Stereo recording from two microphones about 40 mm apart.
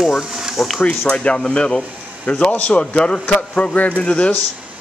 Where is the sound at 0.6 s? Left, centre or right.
Centre.